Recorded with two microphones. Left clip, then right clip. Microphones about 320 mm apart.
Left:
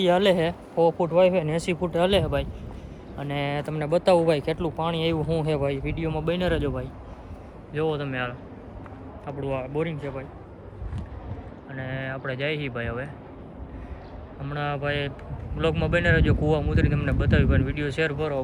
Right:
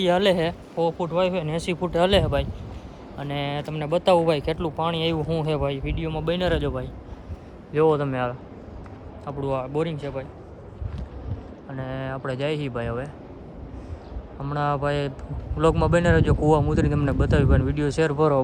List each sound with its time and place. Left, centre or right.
0.0 s speech: centre
7.7 s a man's voice: centre
11.9 s speech: centre
14.4 s speech: centre